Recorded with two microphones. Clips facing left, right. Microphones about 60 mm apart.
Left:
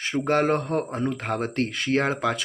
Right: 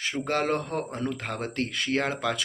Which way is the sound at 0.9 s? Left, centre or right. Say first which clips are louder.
Left 5 dB; centre.